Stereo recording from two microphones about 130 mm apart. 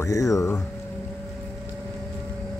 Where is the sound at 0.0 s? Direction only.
25° left (ahead or behind).